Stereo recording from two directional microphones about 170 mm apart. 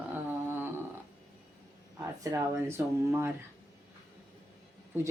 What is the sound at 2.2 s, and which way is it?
Speech, 20° right (ahead or behind).